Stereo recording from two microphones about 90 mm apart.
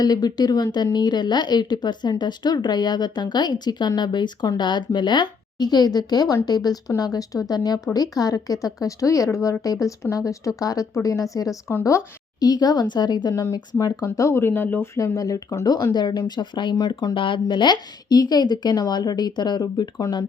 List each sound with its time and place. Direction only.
0.0 s speech: 50° left (ahead or behind); by 12.0 s 30° left (ahead or behind)
12.4 s speech: 50° left (ahead or behind)
13.4 s speech: 40° left (ahead or behind); by 14.8 s 25° left (ahead or behind)
14.9 s speech: 35° left (ahead or behind); by 19.9 s 55° left (ahead or behind)